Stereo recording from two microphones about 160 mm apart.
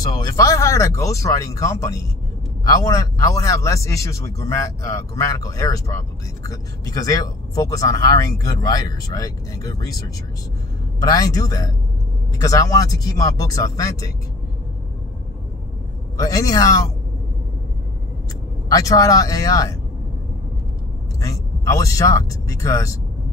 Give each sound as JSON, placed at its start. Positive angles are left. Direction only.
{"t": 0.2, "sound": "speech", "side_deg": 20}
{"t": 16.2, "sound": "speech", "side_deg": 20}
{"t": 18.7, "sound": "speech", "side_deg": 20}
{"t": 21.2, "sound": "speech", "side_deg": 20}